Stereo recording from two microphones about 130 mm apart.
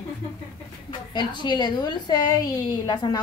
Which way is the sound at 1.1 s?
35° left (ahead or behind).